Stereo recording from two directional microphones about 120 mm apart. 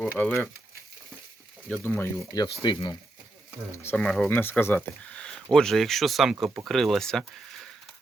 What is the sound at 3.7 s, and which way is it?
Speech, 20° left (ahead or behind).